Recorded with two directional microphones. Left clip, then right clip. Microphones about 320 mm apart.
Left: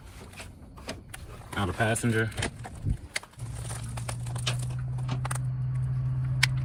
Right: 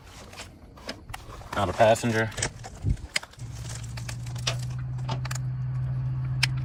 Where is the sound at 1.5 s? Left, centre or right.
Right.